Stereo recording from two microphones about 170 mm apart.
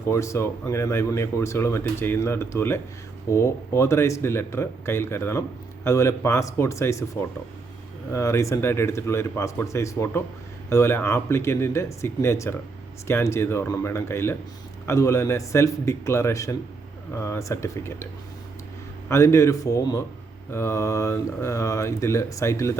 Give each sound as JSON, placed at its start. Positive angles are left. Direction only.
{"t": 0.1, "sound": "speech", "side_deg": 15}